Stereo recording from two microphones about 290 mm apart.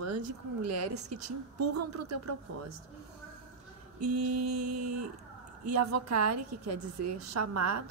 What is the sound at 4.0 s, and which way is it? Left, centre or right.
A woman's voice, right.